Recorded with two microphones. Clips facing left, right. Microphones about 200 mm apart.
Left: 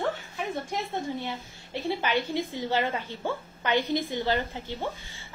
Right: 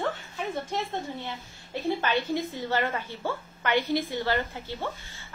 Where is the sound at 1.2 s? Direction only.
15° left (ahead or behind).